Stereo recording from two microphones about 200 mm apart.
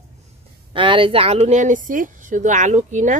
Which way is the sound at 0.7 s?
25° right (ahead or behind).